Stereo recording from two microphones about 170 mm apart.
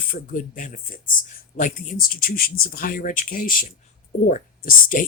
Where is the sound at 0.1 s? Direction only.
50° left (ahead or behind).